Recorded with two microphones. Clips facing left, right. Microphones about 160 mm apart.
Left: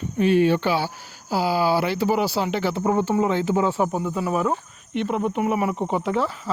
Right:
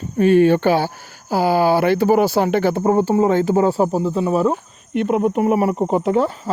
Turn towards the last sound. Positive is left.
turn(degrees=-40)  # may be behind; listen again after turning